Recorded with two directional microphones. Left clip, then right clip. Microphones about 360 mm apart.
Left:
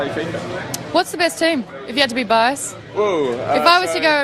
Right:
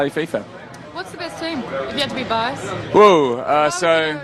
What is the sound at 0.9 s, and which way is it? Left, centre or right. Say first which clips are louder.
A woman's voice: left 11 dB; left.